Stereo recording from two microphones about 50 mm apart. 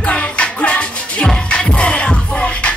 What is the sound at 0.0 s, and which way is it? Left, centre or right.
Music, left.